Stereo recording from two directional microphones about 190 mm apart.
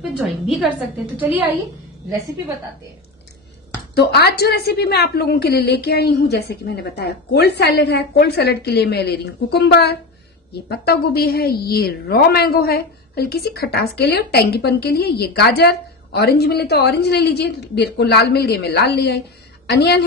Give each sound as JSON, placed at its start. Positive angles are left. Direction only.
{"t": 0.2, "sound": "a woman's voice", "side_deg": 0}
{"t": 3.9, "sound": "a woman's voice", "side_deg": 60}